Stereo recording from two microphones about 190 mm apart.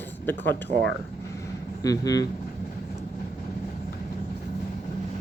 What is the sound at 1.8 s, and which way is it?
Speech, 20° left (ahead or behind).